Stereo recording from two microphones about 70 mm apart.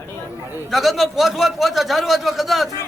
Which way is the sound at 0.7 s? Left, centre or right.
Centre.